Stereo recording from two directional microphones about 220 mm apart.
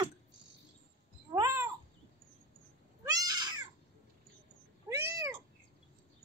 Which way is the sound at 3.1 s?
15° right (ahead or behind).